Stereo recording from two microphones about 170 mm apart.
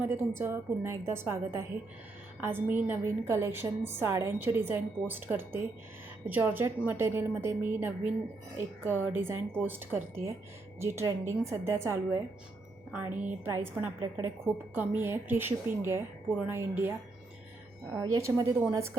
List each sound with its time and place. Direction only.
0.0 s a woman's voice: 15° right (ahead or behind)
17.9 s speech: 20° right (ahead or behind)